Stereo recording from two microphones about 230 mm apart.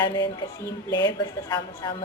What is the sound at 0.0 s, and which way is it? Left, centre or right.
A woman's voice, centre.